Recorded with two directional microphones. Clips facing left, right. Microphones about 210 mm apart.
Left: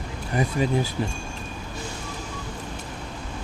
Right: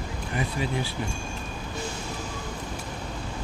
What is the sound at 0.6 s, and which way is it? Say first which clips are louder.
Speech: left 8 dB; 40° left (ahead or behind).